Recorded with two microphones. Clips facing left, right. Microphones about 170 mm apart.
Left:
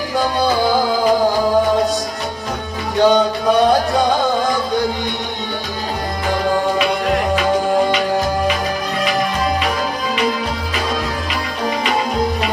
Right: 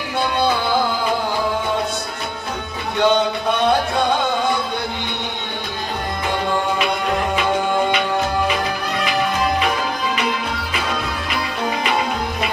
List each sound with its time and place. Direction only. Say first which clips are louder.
3.0 s music: left 4 dB; 35° left (ahead or behind)